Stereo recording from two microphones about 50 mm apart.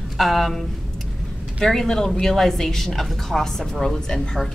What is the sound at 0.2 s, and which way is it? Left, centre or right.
Speech, centre.